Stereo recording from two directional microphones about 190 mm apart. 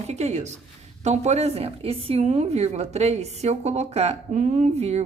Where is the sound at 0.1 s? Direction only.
35° right (ahead or behind).